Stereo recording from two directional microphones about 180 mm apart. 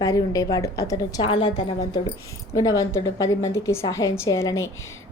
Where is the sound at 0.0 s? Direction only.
20° left (ahead or behind).